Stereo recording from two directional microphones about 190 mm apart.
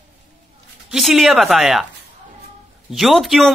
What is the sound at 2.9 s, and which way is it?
Speech, centre (ahead or behind).